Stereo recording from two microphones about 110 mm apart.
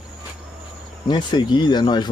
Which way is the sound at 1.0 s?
45° left (ahead or behind).